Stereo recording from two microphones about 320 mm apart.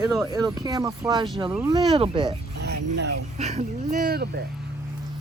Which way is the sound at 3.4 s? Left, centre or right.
Right.